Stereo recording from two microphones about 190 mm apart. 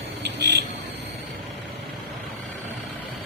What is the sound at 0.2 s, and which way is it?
Vehicle, 65° right (ahead or behind).